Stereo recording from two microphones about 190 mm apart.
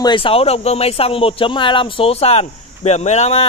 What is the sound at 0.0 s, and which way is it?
A man's voice, 25° left (ahead or behind).